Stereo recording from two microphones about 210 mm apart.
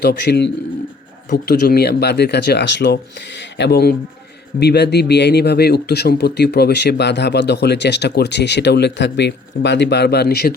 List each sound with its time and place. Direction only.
0.0 s speech: 55° left (ahead or behind)